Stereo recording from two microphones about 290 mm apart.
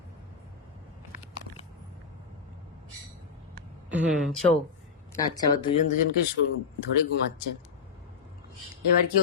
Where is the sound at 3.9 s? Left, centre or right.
Centre.